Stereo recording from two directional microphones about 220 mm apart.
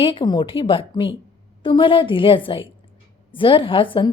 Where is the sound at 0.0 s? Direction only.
25° left (ahead or behind).